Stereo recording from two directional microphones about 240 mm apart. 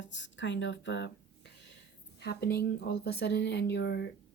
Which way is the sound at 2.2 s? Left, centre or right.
Left.